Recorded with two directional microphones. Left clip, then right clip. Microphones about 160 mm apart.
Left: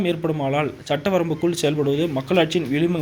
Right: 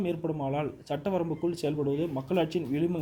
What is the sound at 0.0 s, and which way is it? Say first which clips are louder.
A man's voice: left 9 dB; centre (ahead or behind).